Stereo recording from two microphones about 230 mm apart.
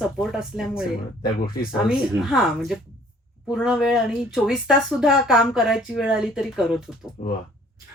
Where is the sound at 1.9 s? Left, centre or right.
Centre.